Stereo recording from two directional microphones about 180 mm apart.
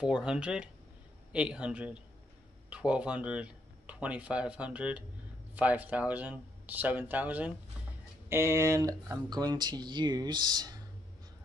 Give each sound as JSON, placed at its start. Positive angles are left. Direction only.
{"t": 0.0, "sound": "speech", "side_deg": -5}